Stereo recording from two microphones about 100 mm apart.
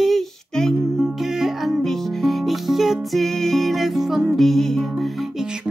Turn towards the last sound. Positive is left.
turn(degrees=0)  # may be behind; listen again after turning